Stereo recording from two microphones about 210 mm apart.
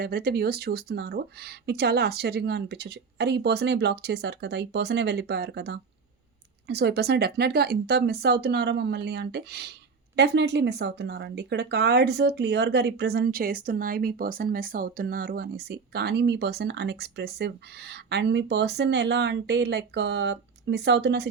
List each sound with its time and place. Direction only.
0.0 s speech: 50° right (ahead or behind)